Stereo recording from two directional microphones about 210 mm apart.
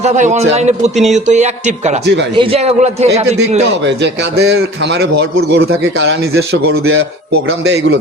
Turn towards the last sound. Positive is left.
turn(degrees=-50)  # may be behind; listen again after turning